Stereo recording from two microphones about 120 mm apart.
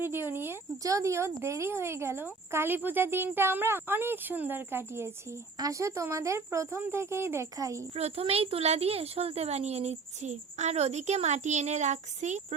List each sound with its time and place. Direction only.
0.0 s speech: 20° right (ahead or behind)
7.9 s speech: 60° right (ahead or behind); by 12.5 s 80° right